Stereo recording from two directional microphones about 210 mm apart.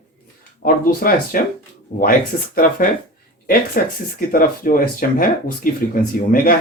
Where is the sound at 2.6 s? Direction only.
40° left (ahead or behind).